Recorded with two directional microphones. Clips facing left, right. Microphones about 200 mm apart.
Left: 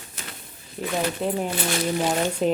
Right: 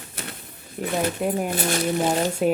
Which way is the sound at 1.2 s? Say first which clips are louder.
Right 1 dB; 10° right (ahead or behind).